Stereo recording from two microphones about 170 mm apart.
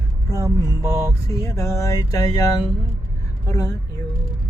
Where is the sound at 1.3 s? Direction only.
20° left (ahead or behind).